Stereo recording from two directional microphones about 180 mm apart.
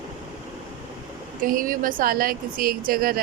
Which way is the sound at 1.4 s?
50° right (ahead or behind).